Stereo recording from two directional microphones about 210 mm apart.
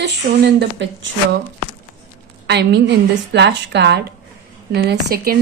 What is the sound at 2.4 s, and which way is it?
Speech, 55° right (ahead or behind).